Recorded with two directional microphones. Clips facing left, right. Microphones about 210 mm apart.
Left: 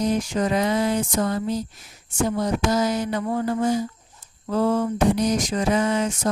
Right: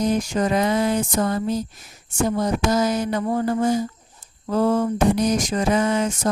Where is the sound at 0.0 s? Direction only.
45° right (ahead or behind).